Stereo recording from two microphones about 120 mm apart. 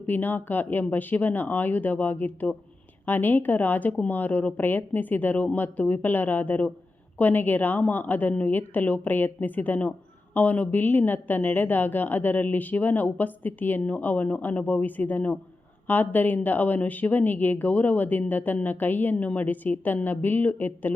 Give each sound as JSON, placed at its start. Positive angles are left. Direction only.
{"t": 0.0, "sound": "a woman's voice", "side_deg": 15}